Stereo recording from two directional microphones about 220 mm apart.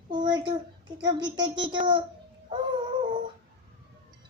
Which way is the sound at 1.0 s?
20° right (ahead or behind).